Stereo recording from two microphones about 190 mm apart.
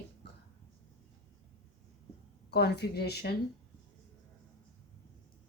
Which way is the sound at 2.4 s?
60° left (ahead or behind).